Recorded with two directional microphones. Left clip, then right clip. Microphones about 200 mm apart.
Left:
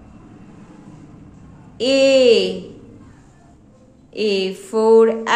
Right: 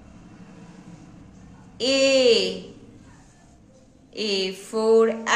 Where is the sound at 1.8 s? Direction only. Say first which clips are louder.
Left 6 dB; 15° left (ahead or behind).